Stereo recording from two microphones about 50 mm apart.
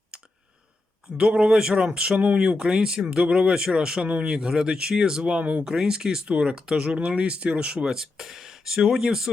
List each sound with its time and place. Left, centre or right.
1.1 s speech: centre
5.4 s speech: right
5.6 s speech: centre
6.2 s speech: right